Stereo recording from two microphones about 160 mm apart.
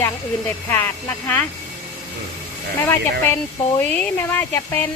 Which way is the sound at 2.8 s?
10° left (ahead or behind).